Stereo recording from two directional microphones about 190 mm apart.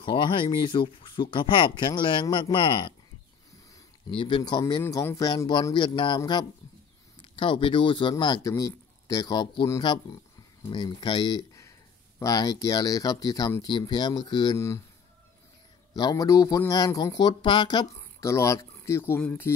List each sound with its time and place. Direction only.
0.0 s speech: 25° left (ahead or behind)
4.1 s speech: 25° left (ahead or behind)
15.9 s speech: 20° left (ahead or behind)